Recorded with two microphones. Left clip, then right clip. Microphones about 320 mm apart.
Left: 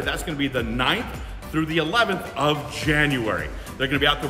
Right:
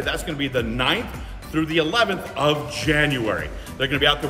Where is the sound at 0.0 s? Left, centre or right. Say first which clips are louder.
Right 1 dB; centre.